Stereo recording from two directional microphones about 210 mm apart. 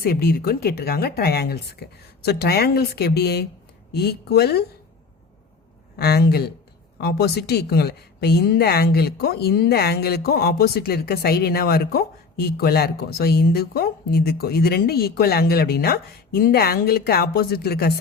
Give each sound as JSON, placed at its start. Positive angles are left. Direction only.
{"t": 0.0, "sound": "a woman's voice", "side_deg": 50}
{"t": 6.0, "sound": "a woman's voice", "side_deg": 50}